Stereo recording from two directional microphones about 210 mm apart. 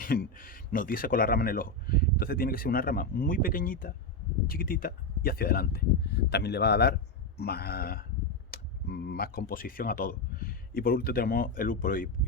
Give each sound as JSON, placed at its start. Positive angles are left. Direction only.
{"t": 0.0, "sound": "speech", "side_deg": 45}